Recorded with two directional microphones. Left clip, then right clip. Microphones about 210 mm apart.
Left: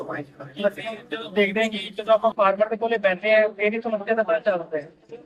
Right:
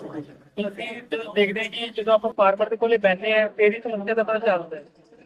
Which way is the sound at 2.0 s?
10° right (ahead or behind).